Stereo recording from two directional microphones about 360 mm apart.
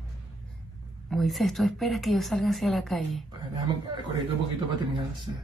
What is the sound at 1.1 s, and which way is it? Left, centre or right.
Speech, centre.